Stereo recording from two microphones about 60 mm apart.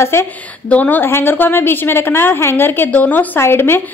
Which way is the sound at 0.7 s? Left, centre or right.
Left.